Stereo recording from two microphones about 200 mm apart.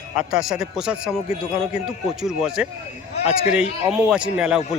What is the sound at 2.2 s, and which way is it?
Speech, centre (ahead or behind).